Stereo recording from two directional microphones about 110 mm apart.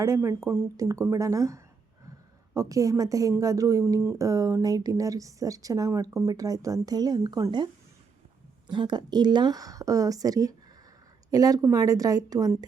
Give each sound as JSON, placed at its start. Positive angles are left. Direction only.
{"t": 0.0, "sound": "a woman's voice", "side_deg": -25}
{"t": 8.7, "sound": "a woman's voice", "side_deg": -45}